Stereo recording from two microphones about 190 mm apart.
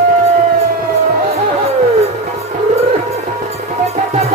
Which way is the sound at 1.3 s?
35° right (ahead or behind).